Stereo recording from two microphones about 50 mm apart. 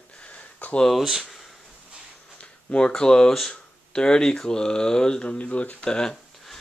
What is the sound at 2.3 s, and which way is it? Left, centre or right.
Speech, centre.